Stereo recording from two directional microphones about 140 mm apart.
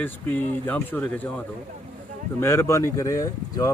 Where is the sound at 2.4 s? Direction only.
20° left (ahead or behind).